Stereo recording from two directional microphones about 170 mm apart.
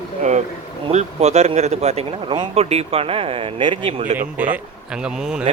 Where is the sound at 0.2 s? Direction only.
45° right (ahead or behind).